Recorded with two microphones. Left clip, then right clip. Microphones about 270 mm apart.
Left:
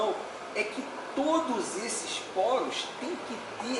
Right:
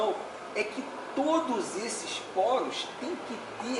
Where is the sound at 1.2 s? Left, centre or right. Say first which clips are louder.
Even; right.